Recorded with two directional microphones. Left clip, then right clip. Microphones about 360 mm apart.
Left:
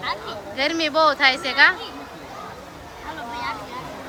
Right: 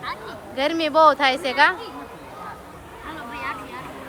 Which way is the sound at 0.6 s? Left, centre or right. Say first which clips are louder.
Right 2 dB; centre.